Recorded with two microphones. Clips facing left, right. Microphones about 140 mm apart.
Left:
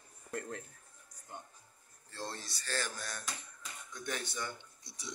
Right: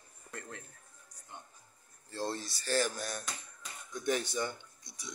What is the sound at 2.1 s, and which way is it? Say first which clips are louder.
Speech: right 6 dB; 10° right (ahead or behind).